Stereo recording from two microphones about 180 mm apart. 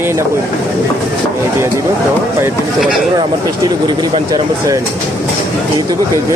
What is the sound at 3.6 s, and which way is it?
Speech, 25° right (ahead or behind).